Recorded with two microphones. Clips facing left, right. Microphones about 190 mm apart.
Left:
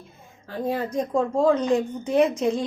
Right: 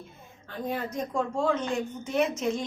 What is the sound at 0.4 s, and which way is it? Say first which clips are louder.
A woman's voice: left 6 dB; 30° left (ahead or behind).